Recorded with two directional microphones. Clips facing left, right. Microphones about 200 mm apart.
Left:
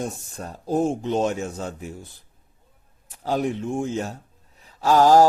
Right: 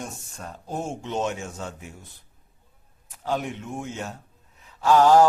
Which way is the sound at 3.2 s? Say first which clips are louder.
Left 5 dB; 35° left (ahead or behind).